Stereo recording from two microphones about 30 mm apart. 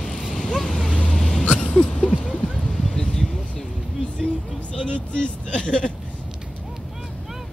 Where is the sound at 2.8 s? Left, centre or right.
Centre.